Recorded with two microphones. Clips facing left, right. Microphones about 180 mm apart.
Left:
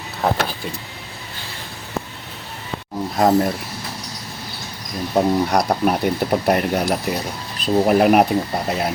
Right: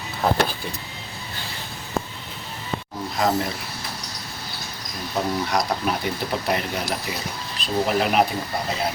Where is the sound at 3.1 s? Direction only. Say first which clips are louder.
Left 7 dB; 50° left (ahead or behind).